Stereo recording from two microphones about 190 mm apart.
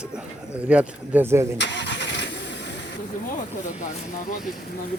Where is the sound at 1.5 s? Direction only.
65° left (ahead or behind).